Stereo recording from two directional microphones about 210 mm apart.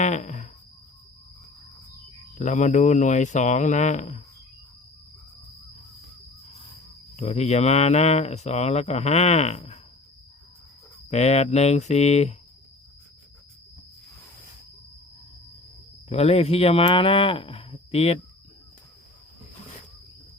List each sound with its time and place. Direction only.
0.0 s a sound: 35° left (ahead or behind)
2.4 s speech: 35° left (ahead or behind)
7.2 s speech: 30° left (ahead or behind)
11.1 s speech: 30° left (ahead or behind)
16.0 s speech: 30° left (ahead or behind)